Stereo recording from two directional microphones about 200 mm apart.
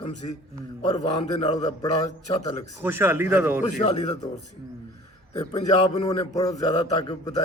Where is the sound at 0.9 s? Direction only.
30° left (ahead or behind).